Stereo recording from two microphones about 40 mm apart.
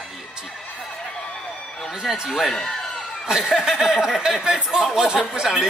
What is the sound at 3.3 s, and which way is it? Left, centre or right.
Speech, centre.